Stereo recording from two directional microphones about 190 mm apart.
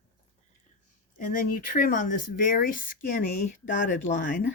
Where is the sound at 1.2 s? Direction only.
45° left (ahead or behind).